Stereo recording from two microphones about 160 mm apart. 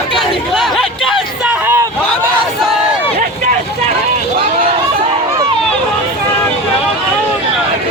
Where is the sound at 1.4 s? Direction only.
10° right (ahead or behind).